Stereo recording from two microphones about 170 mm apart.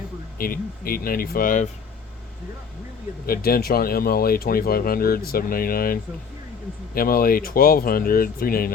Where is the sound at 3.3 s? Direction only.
60° left (ahead or behind).